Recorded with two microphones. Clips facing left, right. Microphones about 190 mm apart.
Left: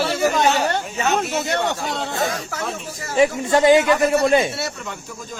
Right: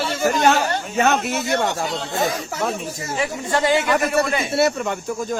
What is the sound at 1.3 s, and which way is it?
Speech, 55° left (ahead or behind).